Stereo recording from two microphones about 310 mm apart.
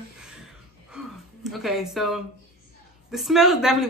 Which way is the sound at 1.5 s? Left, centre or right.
Centre.